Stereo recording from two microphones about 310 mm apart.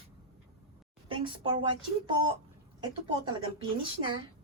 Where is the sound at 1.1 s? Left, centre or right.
Centre.